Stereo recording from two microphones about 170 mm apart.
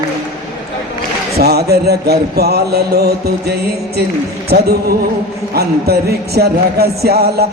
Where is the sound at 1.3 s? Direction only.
70° right (ahead or behind).